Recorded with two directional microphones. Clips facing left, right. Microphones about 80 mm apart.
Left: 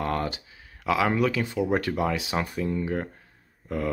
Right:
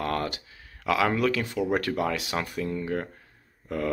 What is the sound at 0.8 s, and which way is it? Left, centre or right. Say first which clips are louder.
Speech: even; centre.